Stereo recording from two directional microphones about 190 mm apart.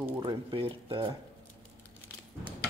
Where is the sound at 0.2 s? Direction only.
25° right (ahead or behind).